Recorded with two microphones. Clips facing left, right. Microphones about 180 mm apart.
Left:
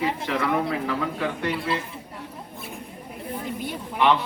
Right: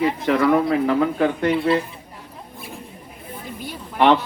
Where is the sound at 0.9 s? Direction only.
50° right (ahead or behind).